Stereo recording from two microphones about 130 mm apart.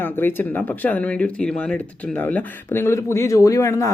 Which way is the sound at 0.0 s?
15° left (ahead or behind).